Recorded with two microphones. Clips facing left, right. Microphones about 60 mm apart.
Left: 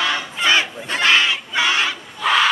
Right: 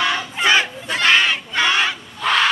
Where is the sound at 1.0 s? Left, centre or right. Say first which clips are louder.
Right 1 dB; centre.